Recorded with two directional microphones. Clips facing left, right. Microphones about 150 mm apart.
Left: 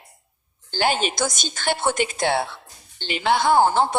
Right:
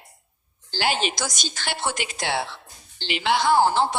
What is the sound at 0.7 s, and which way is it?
Speech, 50° left (ahead or behind).